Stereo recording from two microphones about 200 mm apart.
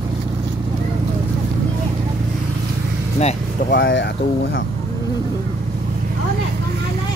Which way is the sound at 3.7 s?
65° left (ahead or behind).